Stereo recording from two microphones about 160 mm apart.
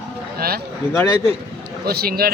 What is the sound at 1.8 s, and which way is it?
Speech, 75° right (ahead or behind).